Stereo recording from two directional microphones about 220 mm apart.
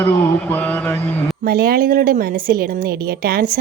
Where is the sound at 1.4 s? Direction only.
45° right (ahead or behind).